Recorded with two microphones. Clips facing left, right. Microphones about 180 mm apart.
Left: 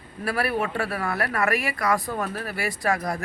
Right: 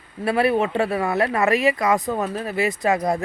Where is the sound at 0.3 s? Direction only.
20° right (ahead or behind).